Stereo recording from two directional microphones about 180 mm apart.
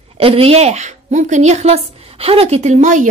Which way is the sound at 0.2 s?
30° right (ahead or behind).